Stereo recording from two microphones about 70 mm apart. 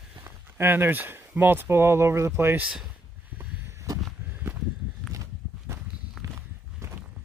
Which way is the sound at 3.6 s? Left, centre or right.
Right.